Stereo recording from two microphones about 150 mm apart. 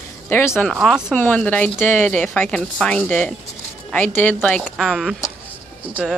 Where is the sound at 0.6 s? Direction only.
Centre (ahead or behind).